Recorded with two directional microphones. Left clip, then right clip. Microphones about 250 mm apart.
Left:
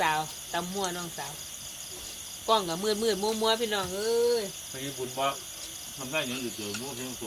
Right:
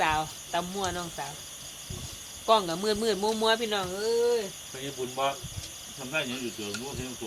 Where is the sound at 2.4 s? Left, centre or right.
Centre.